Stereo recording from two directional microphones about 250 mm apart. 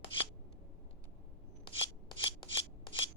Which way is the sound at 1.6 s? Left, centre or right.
Centre.